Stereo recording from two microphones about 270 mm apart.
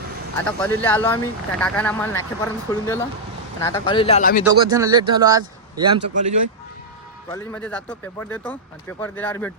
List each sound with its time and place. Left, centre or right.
0.4 s speech: centre; by 4.4 s left
4.4 s speech: centre
7.3 s speech: centre